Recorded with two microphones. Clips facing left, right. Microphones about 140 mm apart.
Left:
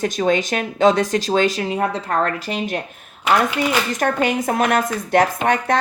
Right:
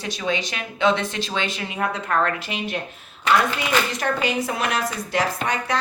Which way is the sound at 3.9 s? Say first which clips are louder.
Left 4 dB; 50° left (ahead or behind).